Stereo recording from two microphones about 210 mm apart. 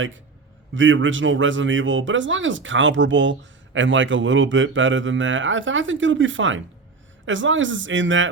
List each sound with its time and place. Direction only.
0.7 s a man's voice: 65° right (ahead or behind)